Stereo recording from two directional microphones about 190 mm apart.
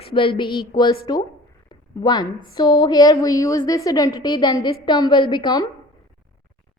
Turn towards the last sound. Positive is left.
turn(degrees=25)  # may be behind; listen again after turning